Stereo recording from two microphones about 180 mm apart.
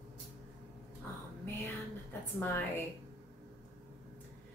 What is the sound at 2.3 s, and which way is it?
Speech, 10° left (ahead or behind).